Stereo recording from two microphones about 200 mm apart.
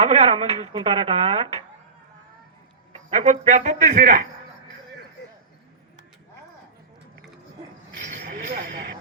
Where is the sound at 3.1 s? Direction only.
35° right (ahead or behind).